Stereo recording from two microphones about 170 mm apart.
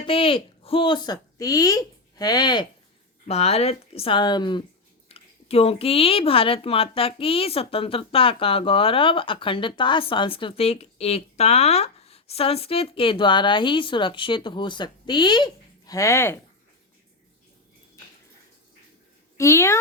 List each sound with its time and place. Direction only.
0.0 s speech: 30° left (ahead or behind)
3.2 s speech: 40° left (ahead or behind); by 16.4 s 15° left (ahead or behind)
19.4 s speech: 15° left (ahead or behind)